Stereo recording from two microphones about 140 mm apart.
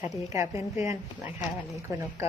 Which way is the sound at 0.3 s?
20° right (ahead or behind).